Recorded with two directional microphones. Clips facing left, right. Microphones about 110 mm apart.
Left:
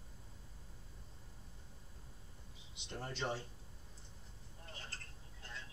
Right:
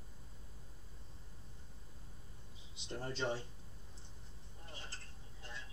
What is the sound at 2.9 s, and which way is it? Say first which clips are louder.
Speech: right 2 dB; 30° right (ahead or behind).